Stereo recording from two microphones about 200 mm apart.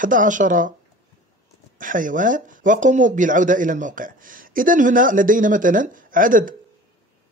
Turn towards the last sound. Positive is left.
turn(degrees=-40)  # may be behind; listen again after turning